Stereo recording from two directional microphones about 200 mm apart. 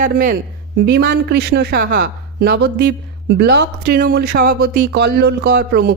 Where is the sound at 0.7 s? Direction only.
55° right (ahead or behind).